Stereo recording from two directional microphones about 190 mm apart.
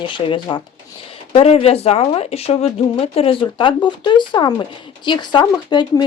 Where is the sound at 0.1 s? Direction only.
25° left (ahead or behind).